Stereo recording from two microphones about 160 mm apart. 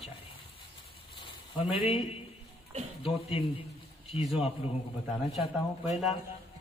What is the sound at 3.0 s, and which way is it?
Speech, 35° left (ahead or behind).